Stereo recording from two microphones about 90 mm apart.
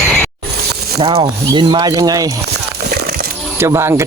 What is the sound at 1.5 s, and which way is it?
Speech, 55° right (ahead or behind).